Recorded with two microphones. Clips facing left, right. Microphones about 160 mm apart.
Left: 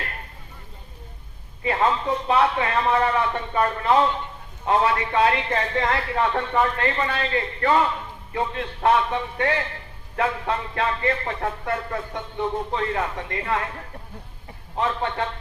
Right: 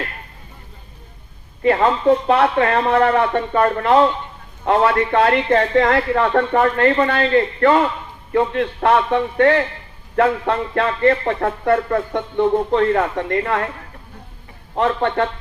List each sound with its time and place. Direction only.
1.6 s music: 60° right (ahead or behind)
4.6 s music: 60° right (ahead or behind)
6.8 s a man's voice: 50° right (ahead or behind)
8.3 s music: 55° right (ahead or behind)
14.8 s music: 60° right (ahead or behind)